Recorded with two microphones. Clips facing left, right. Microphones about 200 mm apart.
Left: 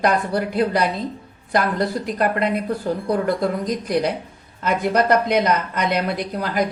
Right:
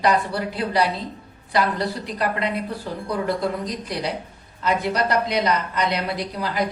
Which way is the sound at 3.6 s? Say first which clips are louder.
Left 6 dB; 50° left (ahead or behind).